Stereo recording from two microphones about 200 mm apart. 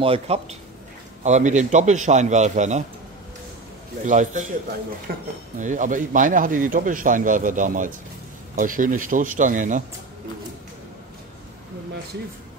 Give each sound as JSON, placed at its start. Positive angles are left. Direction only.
{"t": 0.0, "sound": "a man's voice", "side_deg": -30}
{"t": 4.0, "sound": "a man's voice", "side_deg": -40}
{"t": 5.1, "sound": "speech", "side_deg": -50}
{"t": 5.6, "sound": "a man's voice", "side_deg": -40}